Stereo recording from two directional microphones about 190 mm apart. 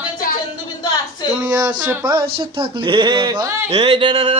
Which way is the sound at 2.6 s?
25° right (ahead or behind).